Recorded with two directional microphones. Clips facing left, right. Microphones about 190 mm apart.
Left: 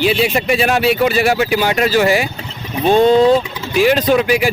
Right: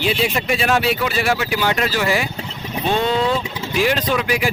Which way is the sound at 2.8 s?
40° left (ahead or behind).